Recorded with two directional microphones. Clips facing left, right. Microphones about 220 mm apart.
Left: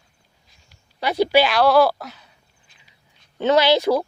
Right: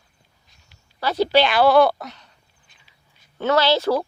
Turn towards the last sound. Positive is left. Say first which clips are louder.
# left 2 dB
turn(degrees=15)  # may be behind; listen again after turning